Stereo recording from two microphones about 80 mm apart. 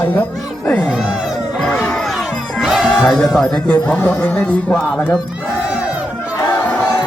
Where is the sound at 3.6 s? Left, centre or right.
Left.